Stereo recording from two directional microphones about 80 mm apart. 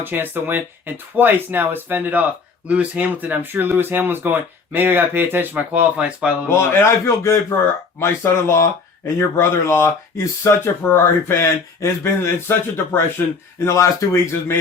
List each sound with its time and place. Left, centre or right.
0.0 s speech: right
6.5 s speech: left
13.7 s speech: left